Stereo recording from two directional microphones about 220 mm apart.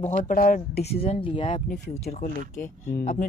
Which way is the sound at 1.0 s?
25° left (ahead or behind).